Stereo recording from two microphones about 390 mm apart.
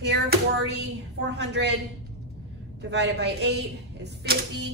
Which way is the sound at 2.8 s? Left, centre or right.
Right.